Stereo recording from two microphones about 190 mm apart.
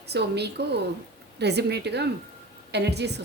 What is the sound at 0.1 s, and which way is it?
A woman's voice, 60° right (ahead or behind).